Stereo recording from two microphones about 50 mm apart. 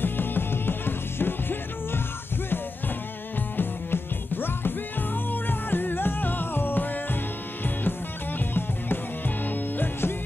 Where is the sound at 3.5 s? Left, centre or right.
Left.